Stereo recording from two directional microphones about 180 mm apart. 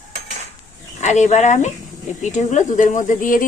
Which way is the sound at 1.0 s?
40° left (ahead or behind).